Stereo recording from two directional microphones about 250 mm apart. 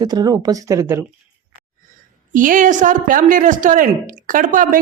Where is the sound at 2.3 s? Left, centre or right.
Right.